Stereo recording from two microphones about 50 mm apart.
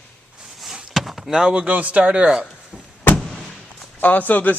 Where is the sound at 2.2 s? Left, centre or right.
Centre.